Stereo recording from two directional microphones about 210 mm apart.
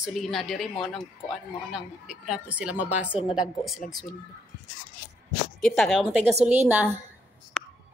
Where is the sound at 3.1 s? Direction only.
25° left (ahead or behind).